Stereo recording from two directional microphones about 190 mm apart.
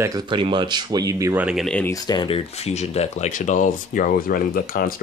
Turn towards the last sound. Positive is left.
turn(degrees=50)  # may be behind; listen again after turning